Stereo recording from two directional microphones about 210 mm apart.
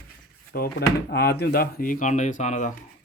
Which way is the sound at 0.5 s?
50° left (ahead or behind).